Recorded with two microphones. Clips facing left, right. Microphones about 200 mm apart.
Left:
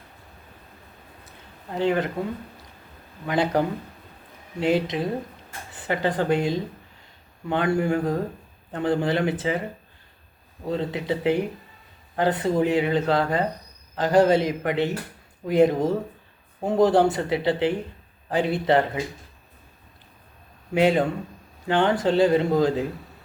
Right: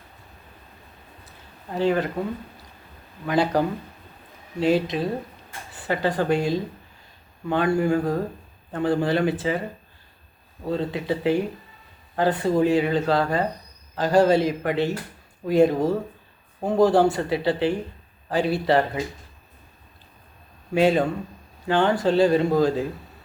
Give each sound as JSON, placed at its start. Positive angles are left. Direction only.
{"t": 1.7, "sound": "speech", "side_deg": 20}
{"t": 3.2, "sound": "a man's voice", "side_deg": 20}
{"t": 10.7, "sound": "speech", "side_deg": 20}
{"t": 20.7, "sound": "speech", "side_deg": 20}